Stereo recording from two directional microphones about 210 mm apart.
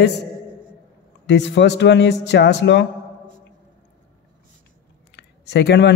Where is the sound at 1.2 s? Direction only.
55° left (ahead or behind).